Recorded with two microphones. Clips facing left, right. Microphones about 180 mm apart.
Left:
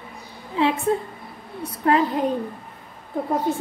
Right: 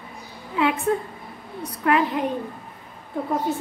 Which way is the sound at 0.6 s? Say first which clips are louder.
Left 1 dB; 30° left (ahead or behind).